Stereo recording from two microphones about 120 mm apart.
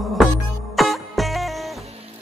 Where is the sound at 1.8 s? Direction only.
55° right (ahead or behind).